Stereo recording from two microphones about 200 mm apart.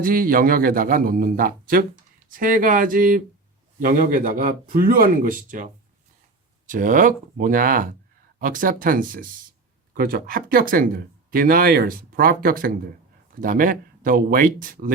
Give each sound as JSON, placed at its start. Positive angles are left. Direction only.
{"t": 0.0, "sound": "speech", "side_deg": -45}
{"t": 6.7, "sound": "speech", "side_deg": -40}